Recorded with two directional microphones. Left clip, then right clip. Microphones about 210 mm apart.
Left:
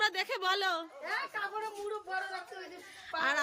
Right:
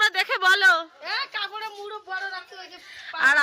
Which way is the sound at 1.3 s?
20° right (ahead or behind).